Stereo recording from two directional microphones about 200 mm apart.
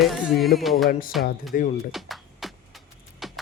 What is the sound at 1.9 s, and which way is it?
Music, centre (ahead or behind).